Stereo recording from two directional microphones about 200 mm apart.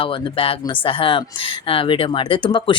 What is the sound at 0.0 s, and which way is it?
Speech, 25° left (ahead or behind).